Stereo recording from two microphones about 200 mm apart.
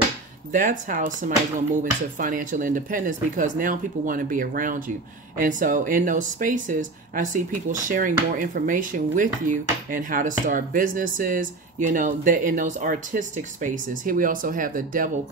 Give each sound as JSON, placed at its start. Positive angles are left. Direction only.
{"t": 0.5, "sound": "speech", "side_deg": -40}